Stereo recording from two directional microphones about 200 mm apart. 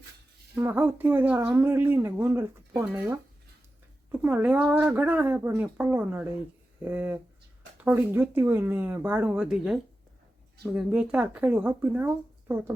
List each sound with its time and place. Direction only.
0.5 s speech: 10° right (ahead or behind)
4.2 s speech: 10° right (ahead or behind)